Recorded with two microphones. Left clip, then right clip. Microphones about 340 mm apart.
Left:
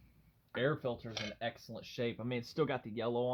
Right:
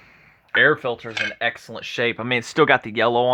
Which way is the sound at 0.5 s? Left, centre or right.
Right.